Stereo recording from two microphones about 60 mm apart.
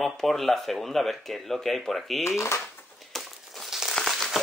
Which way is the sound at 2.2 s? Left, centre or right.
Left.